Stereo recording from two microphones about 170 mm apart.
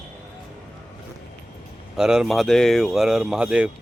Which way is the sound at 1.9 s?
5° right (ahead or behind).